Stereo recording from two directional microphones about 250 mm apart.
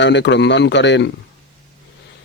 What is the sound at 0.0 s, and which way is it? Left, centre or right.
Speech, left.